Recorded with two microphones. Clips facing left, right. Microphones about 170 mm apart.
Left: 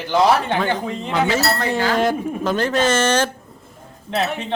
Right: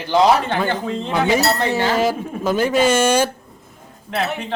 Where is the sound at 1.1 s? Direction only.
15° right (ahead or behind).